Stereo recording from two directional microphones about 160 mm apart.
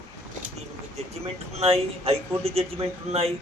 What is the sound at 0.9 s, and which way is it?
Speech, 40° right (ahead or behind).